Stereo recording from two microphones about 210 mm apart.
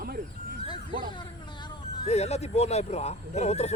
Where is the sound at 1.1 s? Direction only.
20° left (ahead or behind).